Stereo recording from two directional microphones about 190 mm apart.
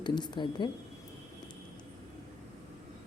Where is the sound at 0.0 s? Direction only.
25° left (ahead or behind).